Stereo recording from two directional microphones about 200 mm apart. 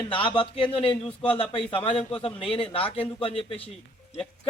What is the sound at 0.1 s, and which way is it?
A man's voice, 25° left (ahead or behind).